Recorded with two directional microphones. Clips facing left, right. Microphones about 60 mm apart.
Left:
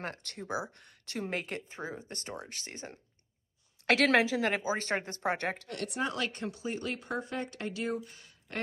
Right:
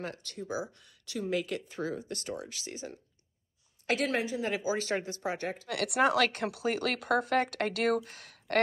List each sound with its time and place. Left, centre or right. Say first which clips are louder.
0.0 s speech: right 1 dB; left
1.7 s speech: right 5 dB; left
3.8 s a woman's voice: left 5 dB; left
4.5 s speech: even; left
5.7 s speech: right 7 dB; right